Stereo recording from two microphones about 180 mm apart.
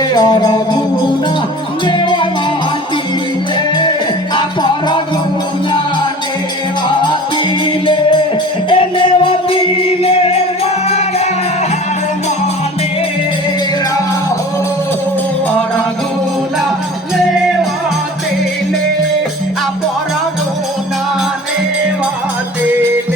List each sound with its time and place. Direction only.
0.1 s music: 25° left (ahead or behind)
1.9 s music: 25° left (ahead or behind)
4.4 s music: 25° left (ahead or behind)
7.6 s music: 30° left (ahead or behind)